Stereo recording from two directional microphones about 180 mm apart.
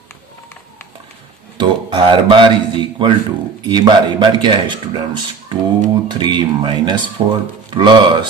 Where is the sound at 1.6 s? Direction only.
25° right (ahead or behind).